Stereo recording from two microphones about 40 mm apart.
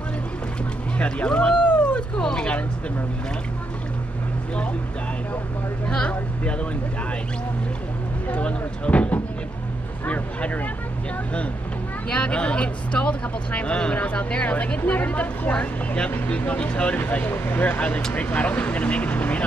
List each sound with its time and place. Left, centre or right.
0.9 s a sound: left
5.9 s speech: left
8.3 s speech: left
12.1 s speech: left
13.9 s speech: left
16.9 s speech: left